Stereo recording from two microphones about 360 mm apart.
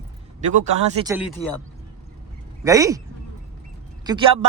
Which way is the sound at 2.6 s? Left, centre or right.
Centre.